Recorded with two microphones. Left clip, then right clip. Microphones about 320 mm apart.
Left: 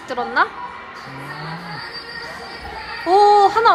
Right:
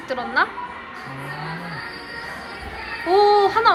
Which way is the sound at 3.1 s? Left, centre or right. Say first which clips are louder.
Left 4 dB; centre.